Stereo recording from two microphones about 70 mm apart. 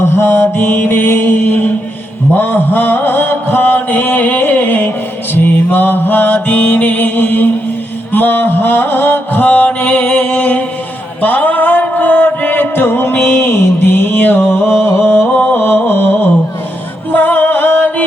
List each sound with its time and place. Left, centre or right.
0.0 s mantra: left
11.2 s music: left